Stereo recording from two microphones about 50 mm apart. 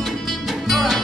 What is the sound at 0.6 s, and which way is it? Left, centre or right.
Music, centre.